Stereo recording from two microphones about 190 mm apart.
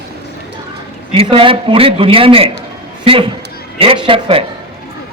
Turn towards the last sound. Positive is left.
turn(degrees=-30)  # may be behind; listen again after turning